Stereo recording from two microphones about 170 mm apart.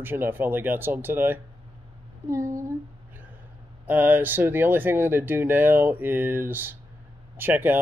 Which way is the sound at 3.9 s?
10° right (ahead or behind).